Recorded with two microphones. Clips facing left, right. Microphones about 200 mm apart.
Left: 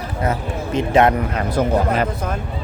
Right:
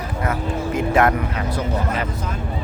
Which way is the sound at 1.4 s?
45° left (ahead or behind).